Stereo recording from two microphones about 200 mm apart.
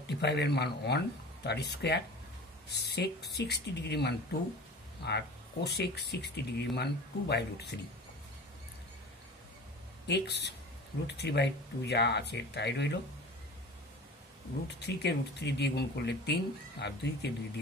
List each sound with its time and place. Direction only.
0.0 s speech: 55° left (ahead or behind)
10.0 s speech: 55° left (ahead or behind)
14.9 s speech: 55° left (ahead or behind)